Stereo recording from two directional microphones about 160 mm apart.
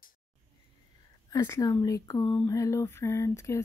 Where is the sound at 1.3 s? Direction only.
20° left (ahead or behind).